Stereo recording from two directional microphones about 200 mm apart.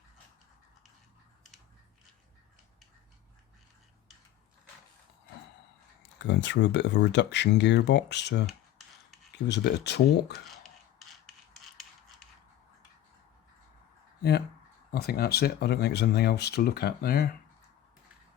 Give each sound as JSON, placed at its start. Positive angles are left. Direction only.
{"t": 6.1, "sound": "speech", "side_deg": 60}
{"t": 9.5, "sound": "speech", "side_deg": 55}
{"t": 14.2, "sound": "speech", "side_deg": 55}